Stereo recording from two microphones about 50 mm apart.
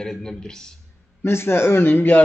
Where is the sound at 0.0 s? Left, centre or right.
Centre.